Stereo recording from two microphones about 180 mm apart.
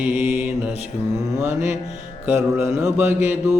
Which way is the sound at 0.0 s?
10° right (ahead or behind).